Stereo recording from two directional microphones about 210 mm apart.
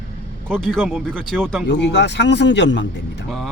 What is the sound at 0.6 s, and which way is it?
Speech, 5° right (ahead or behind).